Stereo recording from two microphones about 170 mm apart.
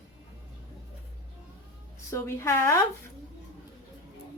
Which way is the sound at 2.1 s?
15° left (ahead or behind).